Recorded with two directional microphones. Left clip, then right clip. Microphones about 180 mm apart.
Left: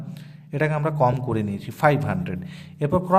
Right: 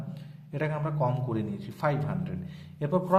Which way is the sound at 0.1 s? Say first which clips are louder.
Left 7 dB; 25° left (ahead or behind).